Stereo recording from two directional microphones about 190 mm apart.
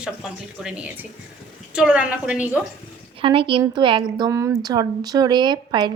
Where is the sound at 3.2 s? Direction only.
25° right (ahead or behind).